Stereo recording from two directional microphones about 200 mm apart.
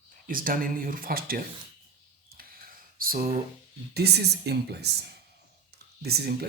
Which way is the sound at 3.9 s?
55° right (ahead or behind).